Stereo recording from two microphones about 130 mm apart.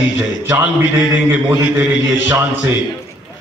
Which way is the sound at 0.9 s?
25° right (ahead or behind).